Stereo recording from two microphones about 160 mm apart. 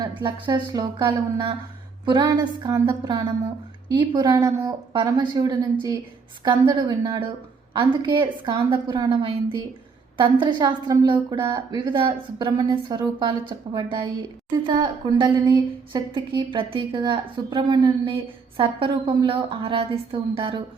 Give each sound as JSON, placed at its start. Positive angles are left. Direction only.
{"t": 0.0, "sound": "a woman's voice", "side_deg": -30}